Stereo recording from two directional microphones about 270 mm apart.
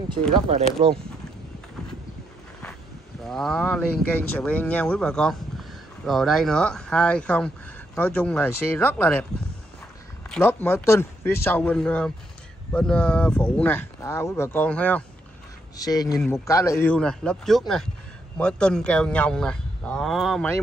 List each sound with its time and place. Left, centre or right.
0.5 s speech: right
3.3 s speech: centre
10.3 s speech: centre